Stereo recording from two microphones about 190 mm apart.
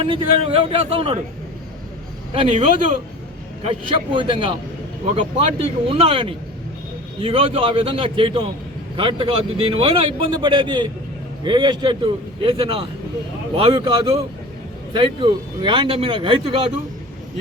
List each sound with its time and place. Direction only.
0.0 s a man's voice: 30° right (ahead or behind)
2.3 s a man's voice: 30° right (ahead or behind)